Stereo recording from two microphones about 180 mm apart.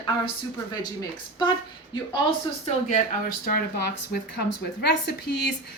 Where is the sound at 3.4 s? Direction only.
55° left (ahead or behind).